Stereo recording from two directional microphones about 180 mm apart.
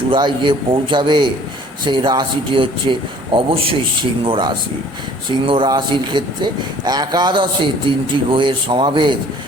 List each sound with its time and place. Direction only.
0.1 s a man's voice: 25° right (ahead or behind)